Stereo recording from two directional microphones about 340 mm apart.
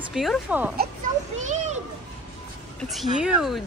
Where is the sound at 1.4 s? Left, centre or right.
Centre.